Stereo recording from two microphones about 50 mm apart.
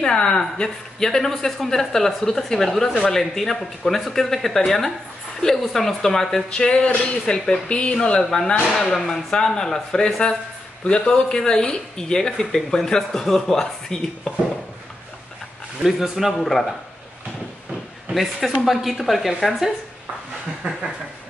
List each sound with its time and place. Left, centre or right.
0.0 s speech: centre
6.5 s a woman's voice: left
15.8 s a woman's voice: centre
18.1 s a woman's voice: centre